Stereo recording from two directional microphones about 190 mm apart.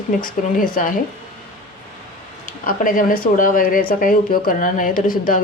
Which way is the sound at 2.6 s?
45° left (ahead or behind).